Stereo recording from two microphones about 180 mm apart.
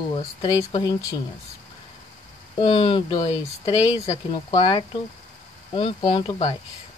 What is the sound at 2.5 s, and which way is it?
Speech, 30° left (ahead or behind).